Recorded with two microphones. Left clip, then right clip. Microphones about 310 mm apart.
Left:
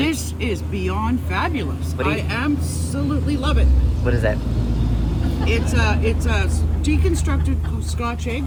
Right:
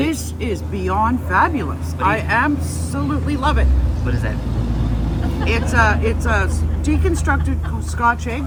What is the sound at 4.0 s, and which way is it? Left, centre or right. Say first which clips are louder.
Speech: left 6 dB; centre.